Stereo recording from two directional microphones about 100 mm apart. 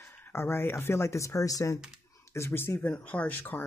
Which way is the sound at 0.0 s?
20° left (ahead or behind).